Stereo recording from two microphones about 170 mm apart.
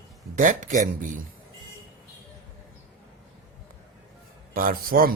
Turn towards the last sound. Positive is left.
turn(degrees=-60)  # may be behind; listen again after turning